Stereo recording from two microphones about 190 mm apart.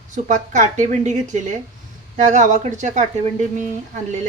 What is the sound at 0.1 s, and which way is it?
A woman's voice, 40° right (ahead or behind).